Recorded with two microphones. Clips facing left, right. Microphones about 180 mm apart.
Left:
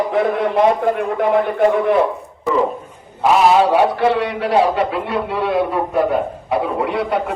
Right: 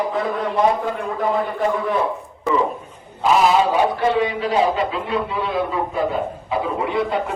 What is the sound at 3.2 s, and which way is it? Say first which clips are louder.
A man's voice: left 3 dB; 65° left (ahead or behind).